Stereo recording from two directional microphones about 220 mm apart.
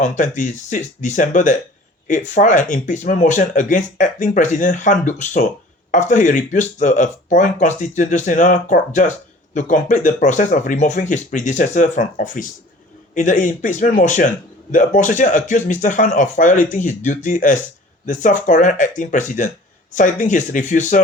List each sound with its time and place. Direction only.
0.0 s speech: 35° left (ahead or behind)